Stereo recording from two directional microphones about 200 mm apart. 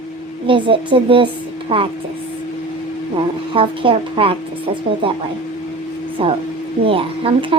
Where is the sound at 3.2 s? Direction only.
25° right (ahead or behind).